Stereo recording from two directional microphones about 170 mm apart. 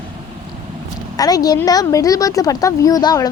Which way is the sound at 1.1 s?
20° left (ahead or behind).